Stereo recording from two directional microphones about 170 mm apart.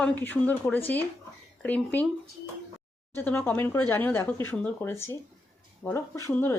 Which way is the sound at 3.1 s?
10° left (ahead or behind).